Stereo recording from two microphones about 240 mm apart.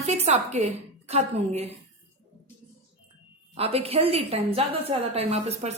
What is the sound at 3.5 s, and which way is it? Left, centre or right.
Speech, right.